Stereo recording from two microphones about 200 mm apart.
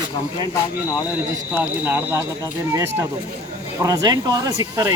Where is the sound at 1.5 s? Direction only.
10° right (ahead or behind).